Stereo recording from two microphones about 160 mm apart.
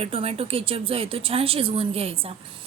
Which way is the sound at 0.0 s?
35° right (ahead or behind).